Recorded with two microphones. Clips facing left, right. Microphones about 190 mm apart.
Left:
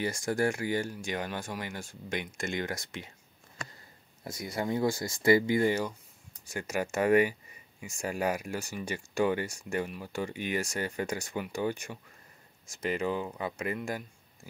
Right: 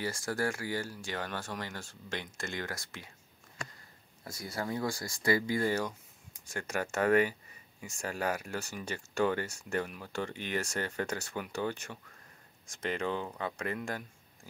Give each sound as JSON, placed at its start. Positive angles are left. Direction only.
{"t": 0.0, "sound": "speech", "side_deg": 20}
{"t": 4.2, "sound": "speech", "side_deg": 20}